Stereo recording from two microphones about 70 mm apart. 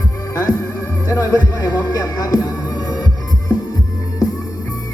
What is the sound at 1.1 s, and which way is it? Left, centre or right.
Speech, left.